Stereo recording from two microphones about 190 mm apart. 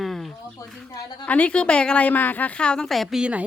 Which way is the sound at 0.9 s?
20° left (ahead or behind).